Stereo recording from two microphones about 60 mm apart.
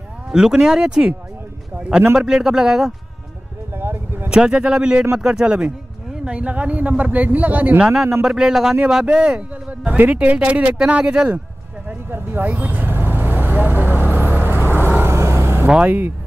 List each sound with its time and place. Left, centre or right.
0.3 s speech: centre
3.7 s vehicle: right
4.3 s a man's voice: centre
7.8 s a man's voice: centre
12.1 s vehicle: right
15.1 s vehicle: right